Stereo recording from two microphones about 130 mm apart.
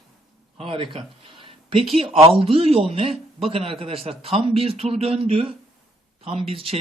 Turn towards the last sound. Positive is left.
turn(degrees=-45)  # may be behind; listen again after turning